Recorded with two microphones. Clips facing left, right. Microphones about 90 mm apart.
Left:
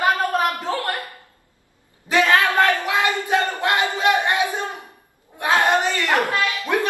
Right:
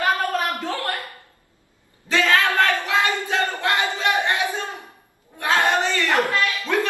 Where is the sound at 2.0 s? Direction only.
20° left (ahead or behind).